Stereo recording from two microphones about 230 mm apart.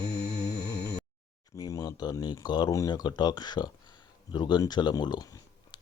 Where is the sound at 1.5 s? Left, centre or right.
Centre.